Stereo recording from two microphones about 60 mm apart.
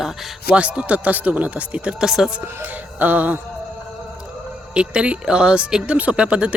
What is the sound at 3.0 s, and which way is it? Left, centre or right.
Speech, right.